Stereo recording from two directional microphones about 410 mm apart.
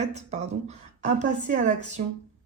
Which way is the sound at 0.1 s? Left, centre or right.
Centre.